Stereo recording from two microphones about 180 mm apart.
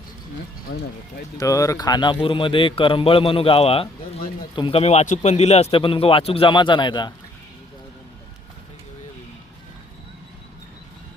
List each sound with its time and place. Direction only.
0.7 s speech: 90° left
1.4 s a man's voice: 20° left (ahead or behind)